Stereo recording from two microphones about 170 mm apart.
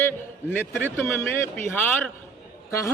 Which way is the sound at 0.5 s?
10° left (ahead or behind).